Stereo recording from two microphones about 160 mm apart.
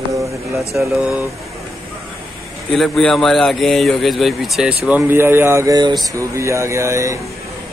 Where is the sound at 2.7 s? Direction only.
5° left (ahead or behind); by 7.2 s 20° right (ahead or behind).